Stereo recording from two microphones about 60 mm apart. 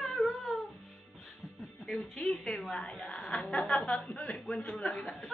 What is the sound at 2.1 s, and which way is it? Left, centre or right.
A woman's voice, centre.